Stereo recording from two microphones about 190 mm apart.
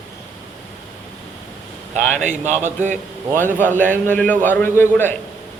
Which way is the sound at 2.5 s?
40° right (ahead or behind).